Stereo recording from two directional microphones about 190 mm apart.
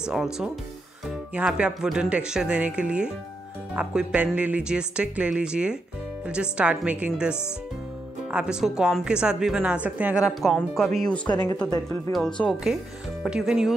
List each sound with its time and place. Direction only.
0.0 s speech: 5° right (ahead or behind)
11.2 s speech: 20° left (ahead or behind)
12.4 s speech: 10° left (ahead or behind)
13.2 s speech: 5° right (ahead or behind)